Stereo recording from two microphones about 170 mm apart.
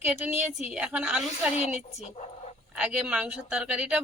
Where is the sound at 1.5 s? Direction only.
40° left (ahead or behind).